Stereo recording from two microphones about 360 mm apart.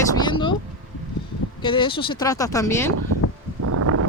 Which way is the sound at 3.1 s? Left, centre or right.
Right.